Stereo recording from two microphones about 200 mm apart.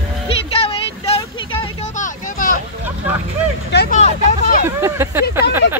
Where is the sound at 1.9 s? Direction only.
40° left (ahead or behind).